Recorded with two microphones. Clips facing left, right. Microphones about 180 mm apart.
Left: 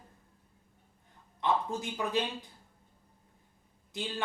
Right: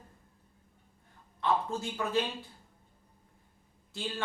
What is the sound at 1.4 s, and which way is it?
Speech, 15° left (ahead or behind).